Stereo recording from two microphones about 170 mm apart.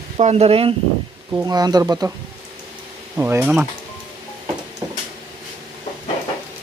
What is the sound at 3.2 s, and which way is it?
Speech, 15° right (ahead or behind).